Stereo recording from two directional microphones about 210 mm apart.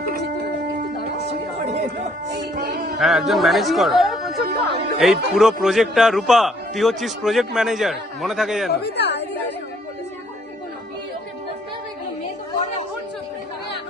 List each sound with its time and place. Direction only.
2.3 s music: 50° right (ahead or behind)
3.0 s speech: centre (ahead or behind)
8.7 s a woman's voice: 50° left (ahead or behind)